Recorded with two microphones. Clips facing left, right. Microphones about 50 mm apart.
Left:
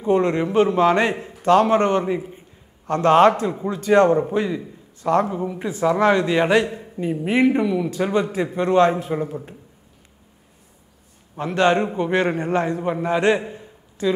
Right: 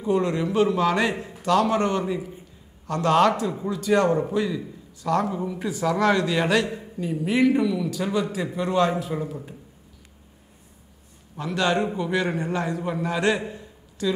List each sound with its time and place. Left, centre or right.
0.0 s a man's voice: left
5.4 s a man's voice: centre
11.3 s a man's voice: left
13.5 s a sound: left